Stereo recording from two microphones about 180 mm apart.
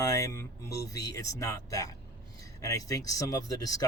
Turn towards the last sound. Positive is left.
turn(degrees=20)  # may be behind; listen again after turning